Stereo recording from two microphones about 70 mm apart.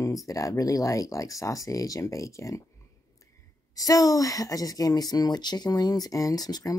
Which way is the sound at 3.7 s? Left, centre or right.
Left.